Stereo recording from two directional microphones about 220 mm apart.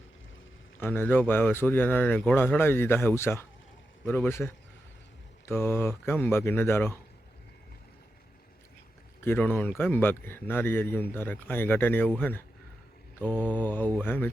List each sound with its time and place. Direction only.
0.8 s speech: 10° left (ahead or behind)
9.2 s speech: 10° left (ahead or behind)